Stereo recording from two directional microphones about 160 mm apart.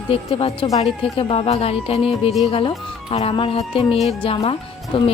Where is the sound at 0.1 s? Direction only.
35° left (ahead or behind).